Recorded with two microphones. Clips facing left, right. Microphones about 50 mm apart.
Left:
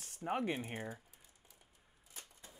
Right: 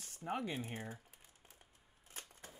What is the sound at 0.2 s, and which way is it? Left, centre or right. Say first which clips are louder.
Speech: left 3 dB; left.